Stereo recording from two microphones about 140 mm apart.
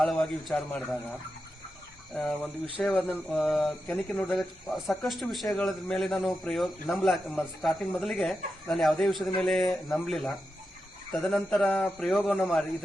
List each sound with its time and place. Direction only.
0.0 s speech: centre (ahead or behind)
2.1 s speech: 5° left (ahead or behind)